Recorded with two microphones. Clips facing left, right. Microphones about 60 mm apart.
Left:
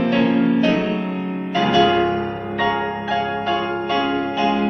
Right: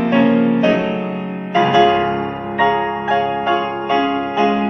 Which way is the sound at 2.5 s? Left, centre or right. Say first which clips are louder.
Right 5 dB; centre.